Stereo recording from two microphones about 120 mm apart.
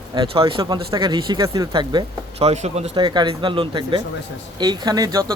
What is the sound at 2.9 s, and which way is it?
Speech, 40° right (ahead or behind).